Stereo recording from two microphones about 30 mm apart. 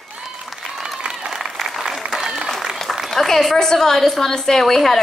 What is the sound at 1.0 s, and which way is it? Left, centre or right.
Applause, right.